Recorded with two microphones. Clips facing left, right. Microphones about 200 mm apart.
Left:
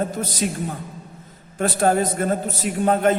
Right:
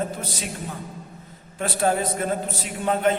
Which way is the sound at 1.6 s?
45° left (ahead or behind).